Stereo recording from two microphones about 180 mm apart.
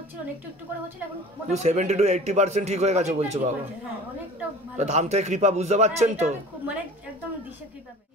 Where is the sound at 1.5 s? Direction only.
40° right (ahead or behind).